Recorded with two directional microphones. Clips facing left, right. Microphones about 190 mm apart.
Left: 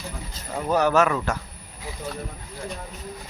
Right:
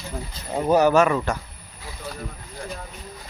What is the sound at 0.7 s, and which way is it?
Speech, centre (ahead or behind).